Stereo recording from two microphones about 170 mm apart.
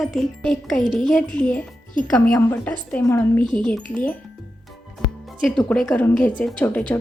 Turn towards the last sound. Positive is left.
turn(degrees=10)  # may be behind; listen again after turning